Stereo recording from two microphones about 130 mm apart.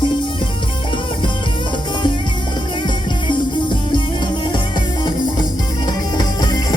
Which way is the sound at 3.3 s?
40° left (ahead or behind).